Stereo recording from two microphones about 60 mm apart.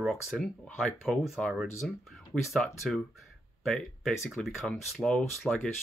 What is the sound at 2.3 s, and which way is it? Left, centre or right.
Speech, centre.